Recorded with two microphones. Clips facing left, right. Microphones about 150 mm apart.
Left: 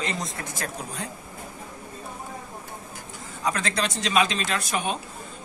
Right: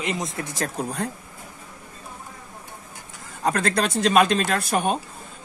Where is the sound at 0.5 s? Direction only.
40° right (ahead or behind).